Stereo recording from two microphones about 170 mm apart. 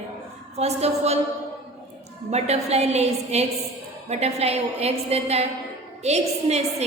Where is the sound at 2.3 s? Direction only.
40° right (ahead or behind).